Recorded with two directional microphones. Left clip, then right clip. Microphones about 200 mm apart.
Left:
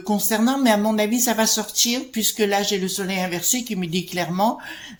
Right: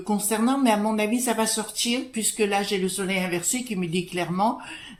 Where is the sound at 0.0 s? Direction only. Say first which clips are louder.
Left 3 dB; 35° left (ahead or behind).